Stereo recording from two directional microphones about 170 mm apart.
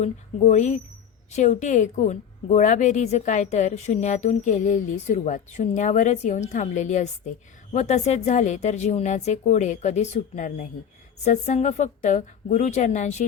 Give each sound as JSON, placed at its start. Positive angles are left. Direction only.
{"t": 0.0, "sound": "a woman's voice", "side_deg": 45}